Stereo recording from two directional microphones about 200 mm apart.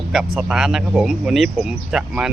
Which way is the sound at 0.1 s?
Centre (ahead or behind).